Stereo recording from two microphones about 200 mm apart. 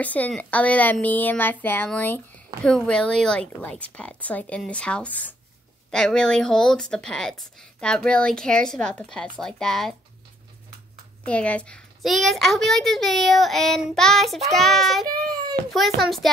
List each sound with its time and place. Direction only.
0.0 s a woman's voice: 5° left (ahead or behind)
11.2 s speech: 5° left (ahead or behind)